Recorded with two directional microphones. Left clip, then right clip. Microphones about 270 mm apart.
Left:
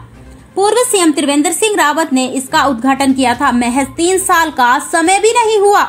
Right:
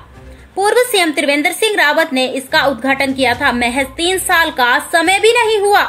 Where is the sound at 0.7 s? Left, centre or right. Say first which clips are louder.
Left 1 dB; centre.